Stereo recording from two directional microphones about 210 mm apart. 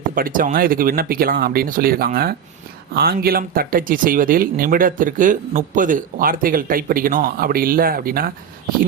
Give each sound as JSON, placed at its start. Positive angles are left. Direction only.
{"t": 0.1, "sound": "speech", "side_deg": -40}